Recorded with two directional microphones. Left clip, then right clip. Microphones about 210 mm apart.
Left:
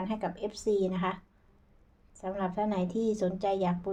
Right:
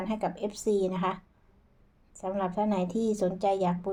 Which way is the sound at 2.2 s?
15° right (ahead or behind).